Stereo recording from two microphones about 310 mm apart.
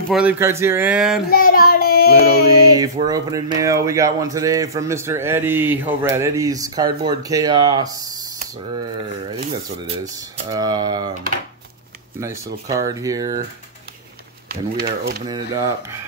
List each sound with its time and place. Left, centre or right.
0.1 s speech: centre
1.3 s child singing: left
2.4 s speech: centre
9.4 s speech: right
12.6 s speech: centre
14.5 s speech: right
15.2 s speech: centre